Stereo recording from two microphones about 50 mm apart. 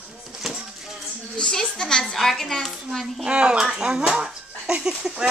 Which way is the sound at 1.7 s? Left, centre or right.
Centre.